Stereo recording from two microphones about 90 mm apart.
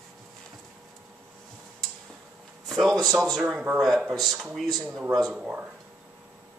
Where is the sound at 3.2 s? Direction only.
5° right (ahead or behind).